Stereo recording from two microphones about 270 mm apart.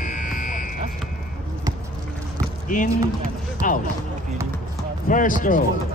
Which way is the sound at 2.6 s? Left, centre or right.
Left.